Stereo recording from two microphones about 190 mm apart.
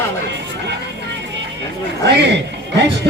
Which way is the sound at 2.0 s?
65° right (ahead or behind).